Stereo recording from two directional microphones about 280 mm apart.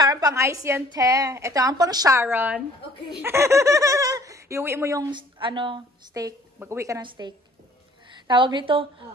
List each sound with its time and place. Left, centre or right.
0.0 s a woman's voice: centre